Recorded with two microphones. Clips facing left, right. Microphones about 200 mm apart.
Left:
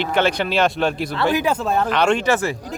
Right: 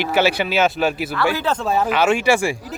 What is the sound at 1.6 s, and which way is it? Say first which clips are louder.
Speech: right 1 dB; 5° right (ahead or behind).